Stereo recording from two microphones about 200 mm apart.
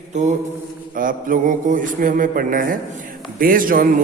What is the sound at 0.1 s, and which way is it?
Mantra, 35° right (ahead or behind).